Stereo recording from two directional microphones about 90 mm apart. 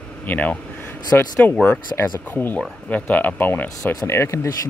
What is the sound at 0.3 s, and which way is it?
Speech, 15° left (ahead or behind).